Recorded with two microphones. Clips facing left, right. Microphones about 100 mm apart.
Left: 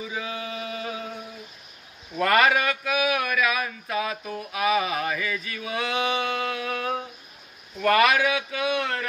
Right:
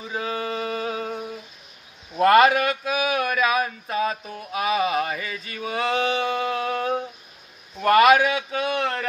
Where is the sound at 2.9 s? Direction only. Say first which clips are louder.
Right 1 dB; 30° right (ahead or behind).